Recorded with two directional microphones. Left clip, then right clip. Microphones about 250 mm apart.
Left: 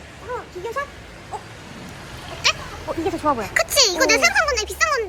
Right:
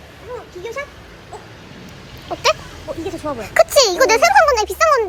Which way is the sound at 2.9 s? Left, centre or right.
Left.